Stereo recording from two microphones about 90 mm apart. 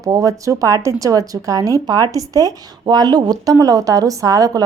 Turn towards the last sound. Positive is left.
turn(degrees=-45)  # may be behind; listen again after turning